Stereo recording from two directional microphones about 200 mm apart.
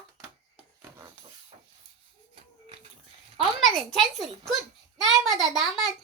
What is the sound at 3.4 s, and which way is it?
A woman's voice, centre (ahead or behind).